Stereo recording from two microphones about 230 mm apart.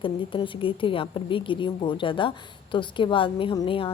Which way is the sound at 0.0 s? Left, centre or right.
Left.